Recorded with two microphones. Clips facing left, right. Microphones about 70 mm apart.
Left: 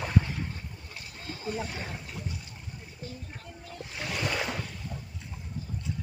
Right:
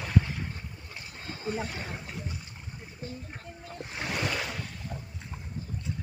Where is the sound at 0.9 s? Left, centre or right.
Right.